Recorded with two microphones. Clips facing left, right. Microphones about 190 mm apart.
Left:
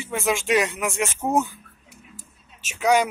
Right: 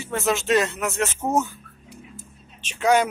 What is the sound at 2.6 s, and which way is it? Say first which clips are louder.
Speech: even; 10° left (ahead or behind).